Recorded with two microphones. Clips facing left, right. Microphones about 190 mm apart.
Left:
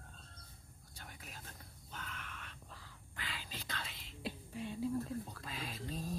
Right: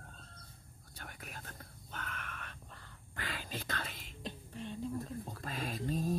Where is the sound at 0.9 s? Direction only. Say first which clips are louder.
Right 4 dB; 60° right (ahead or behind).